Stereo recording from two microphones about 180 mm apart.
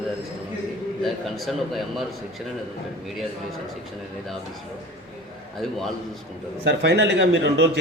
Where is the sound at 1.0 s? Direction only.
Centre (ahead or behind).